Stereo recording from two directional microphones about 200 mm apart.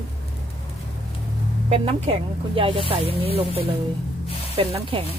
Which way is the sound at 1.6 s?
30° right (ahead or behind).